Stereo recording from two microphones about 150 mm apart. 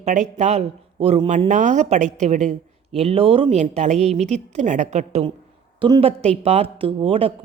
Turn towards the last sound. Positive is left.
turn(degrees=-40)  # may be behind; listen again after turning